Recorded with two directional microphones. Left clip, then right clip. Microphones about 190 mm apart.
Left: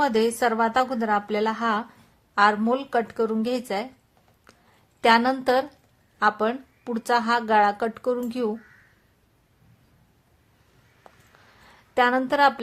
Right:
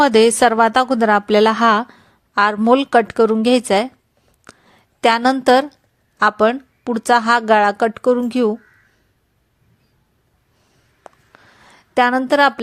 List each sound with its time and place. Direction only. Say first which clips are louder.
0.0 s speech: right 10 dB; 40° right (ahead or behind)
4.9 s speech: right 5 dB; 35° right (ahead or behind)
11.0 s a sound: right 9 dB; 30° right (ahead or behind)
12.3 s speech: right 7 dB; 30° right (ahead or behind)